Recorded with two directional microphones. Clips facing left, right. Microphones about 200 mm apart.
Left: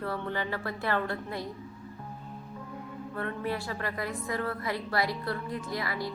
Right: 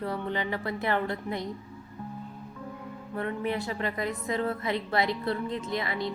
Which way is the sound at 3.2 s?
20° right (ahead or behind).